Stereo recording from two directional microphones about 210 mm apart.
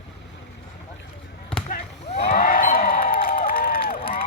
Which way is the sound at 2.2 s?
40° left (ahead or behind).